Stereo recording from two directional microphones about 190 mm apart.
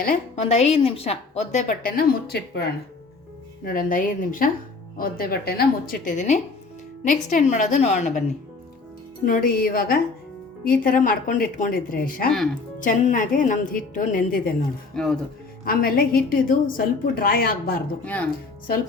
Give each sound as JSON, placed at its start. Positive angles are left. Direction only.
{"t": 0.0, "sound": "a woman's voice", "side_deg": 50}
{"t": 0.4, "sound": "a woman's voice", "side_deg": 35}
{"t": 2.0, "sound": "a woman's voice", "side_deg": 55}
{"t": 9.2, "sound": "a woman's voice", "side_deg": 45}
{"t": 14.9, "sound": "speech", "side_deg": 5}
{"t": 15.6, "sound": "a woman's voice", "side_deg": 50}
{"t": 18.0, "sound": "speech", "side_deg": 10}